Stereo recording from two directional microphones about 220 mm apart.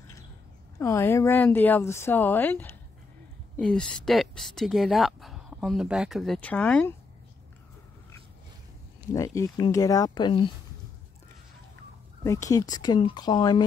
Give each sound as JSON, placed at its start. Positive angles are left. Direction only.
{"t": 0.7, "sound": "a woman's voice", "side_deg": 15}
{"t": 9.1, "sound": "a woman's voice", "side_deg": 15}
{"t": 12.2, "sound": "a woman's voice", "side_deg": 15}